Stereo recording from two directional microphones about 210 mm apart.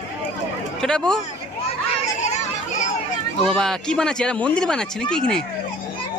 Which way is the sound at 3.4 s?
Centre (ahead or behind).